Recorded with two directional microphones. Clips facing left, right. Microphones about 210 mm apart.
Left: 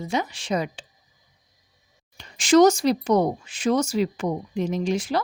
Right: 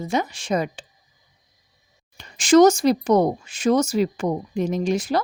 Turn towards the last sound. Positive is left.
turn(degrees=-40)  # may be behind; listen again after turning